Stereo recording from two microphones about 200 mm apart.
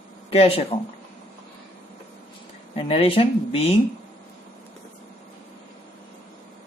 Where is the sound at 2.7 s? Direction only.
30° left (ahead or behind).